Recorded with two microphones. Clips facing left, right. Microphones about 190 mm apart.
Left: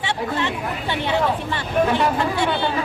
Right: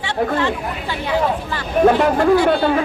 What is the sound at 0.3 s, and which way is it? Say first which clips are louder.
Speech: right 4 dB; 25° left (ahead or behind).